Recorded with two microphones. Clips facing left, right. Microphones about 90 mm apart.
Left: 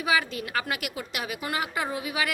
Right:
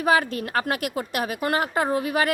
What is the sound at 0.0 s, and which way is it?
Speech, 45° right (ahead or behind).